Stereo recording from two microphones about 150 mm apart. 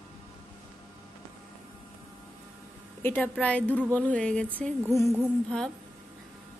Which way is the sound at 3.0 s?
15° left (ahead or behind).